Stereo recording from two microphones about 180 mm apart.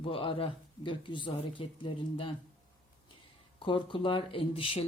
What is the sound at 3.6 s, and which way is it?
Speech, 30° left (ahead or behind).